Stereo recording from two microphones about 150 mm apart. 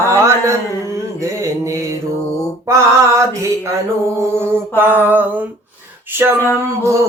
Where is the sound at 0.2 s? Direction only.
20° right (ahead or behind).